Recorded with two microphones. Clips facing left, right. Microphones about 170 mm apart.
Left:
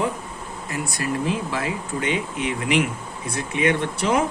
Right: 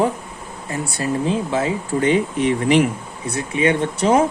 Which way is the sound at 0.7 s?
30° right (ahead or behind).